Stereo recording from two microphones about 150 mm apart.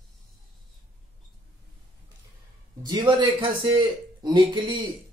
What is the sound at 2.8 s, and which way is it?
Speech, 30° right (ahead or behind).